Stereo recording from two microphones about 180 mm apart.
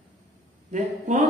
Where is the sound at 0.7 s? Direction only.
40° right (ahead or behind).